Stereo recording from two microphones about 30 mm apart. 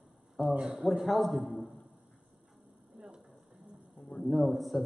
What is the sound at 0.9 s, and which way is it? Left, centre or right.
Speech, centre.